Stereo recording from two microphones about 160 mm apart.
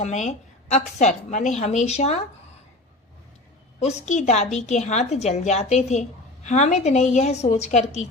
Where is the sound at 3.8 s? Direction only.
45° left (ahead or behind).